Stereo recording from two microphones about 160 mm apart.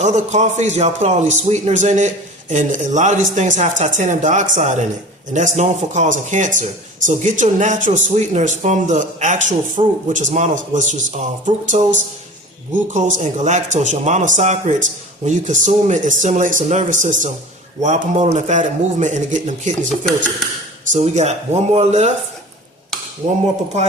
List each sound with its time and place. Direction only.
0.0 s speech: 45° right (ahead or behind)
20.9 s speech: 45° right (ahead or behind)